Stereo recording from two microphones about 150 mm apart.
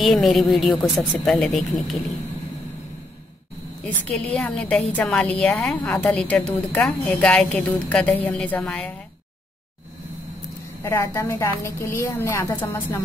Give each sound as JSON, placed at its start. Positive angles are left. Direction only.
{"t": 0.0, "sound": "a woman's voice", "side_deg": 0}
{"t": 3.8, "sound": "a woman's voice", "side_deg": 5}
{"t": 10.8, "sound": "a woman's voice", "side_deg": 20}